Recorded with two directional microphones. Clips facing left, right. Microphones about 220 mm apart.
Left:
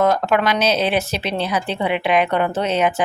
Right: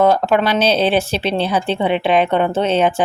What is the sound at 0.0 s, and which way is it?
Speech, 30° right (ahead or behind).